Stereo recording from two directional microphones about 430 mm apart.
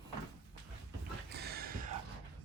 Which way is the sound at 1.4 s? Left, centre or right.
Right.